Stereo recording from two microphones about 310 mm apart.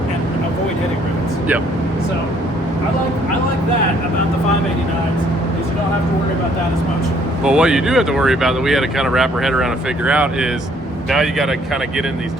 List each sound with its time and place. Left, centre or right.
7.4 s speech: centre